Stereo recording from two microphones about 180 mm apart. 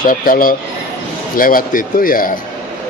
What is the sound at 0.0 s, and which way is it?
Speech, 50° left (ahead or behind).